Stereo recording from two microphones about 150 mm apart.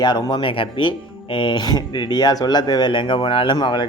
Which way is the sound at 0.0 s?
30° left (ahead or behind).